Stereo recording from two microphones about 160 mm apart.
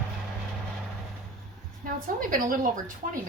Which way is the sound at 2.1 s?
60° right (ahead or behind).